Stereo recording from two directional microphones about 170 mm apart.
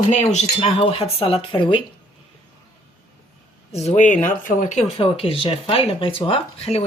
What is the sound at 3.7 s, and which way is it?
Speech, 40° left (ahead or behind).